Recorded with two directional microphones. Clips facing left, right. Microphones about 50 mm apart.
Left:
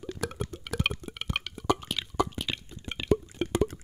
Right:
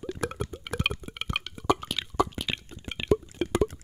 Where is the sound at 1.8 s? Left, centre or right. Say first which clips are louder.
Right 2 dB; right.